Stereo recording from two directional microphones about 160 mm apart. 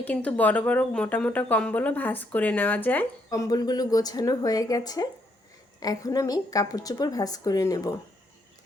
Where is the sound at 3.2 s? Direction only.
20° left (ahead or behind).